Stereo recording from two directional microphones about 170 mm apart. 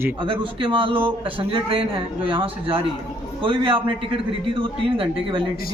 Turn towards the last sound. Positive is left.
turn(degrees=-30)  # may be behind; listen again after turning